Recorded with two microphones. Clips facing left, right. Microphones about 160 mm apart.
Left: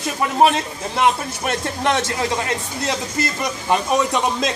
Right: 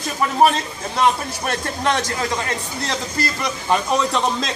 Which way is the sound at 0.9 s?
10° left (ahead or behind).